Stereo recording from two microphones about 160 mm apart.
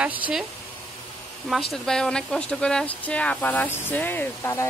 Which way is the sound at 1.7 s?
5° left (ahead or behind).